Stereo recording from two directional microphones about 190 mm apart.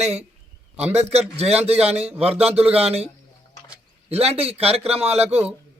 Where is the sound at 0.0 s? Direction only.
35° right (ahead or behind).